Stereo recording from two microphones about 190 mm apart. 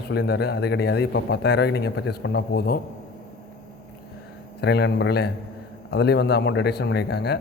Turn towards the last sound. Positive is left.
turn(degrees=60)  # may be behind; listen again after turning